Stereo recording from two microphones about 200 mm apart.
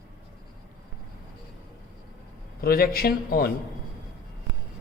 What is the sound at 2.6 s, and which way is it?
Speech, 45° left (ahead or behind).